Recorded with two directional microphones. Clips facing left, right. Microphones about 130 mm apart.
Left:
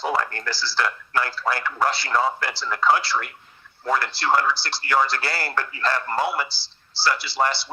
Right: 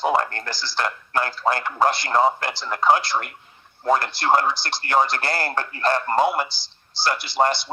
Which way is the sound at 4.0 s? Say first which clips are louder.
Right 1 dB; 50° right (ahead or behind).